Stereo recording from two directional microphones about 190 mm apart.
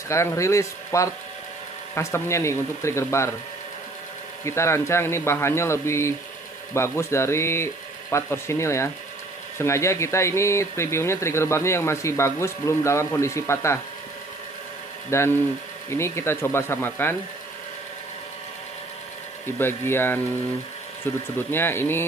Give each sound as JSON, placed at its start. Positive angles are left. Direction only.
{"t": 0.1, "sound": "speech", "side_deg": 15}
{"t": 4.5, "sound": "speech", "side_deg": 15}
{"t": 15.0, "sound": "speech", "side_deg": 15}
{"t": 19.6, "sound": "speech", "side_deg": 10}